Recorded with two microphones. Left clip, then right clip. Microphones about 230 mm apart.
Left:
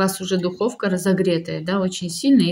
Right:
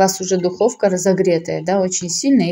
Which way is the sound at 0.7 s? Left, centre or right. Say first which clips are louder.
Right 6 dB; centre.